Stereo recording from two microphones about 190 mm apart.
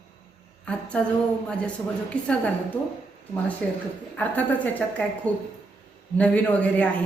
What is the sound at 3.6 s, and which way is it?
A woman's voice, 5° left (ahead or behind).